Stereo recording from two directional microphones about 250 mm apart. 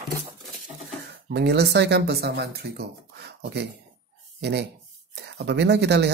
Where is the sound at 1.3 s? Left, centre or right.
Right.